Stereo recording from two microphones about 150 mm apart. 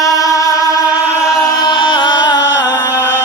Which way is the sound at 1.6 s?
30° left (ahead or behind).